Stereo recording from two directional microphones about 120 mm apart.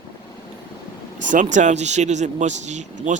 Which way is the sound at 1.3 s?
90° right.